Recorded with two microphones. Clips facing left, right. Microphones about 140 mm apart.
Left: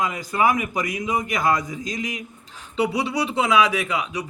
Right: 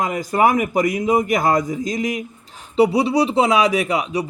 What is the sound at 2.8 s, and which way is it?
Speech, 35° right (ahead or behind).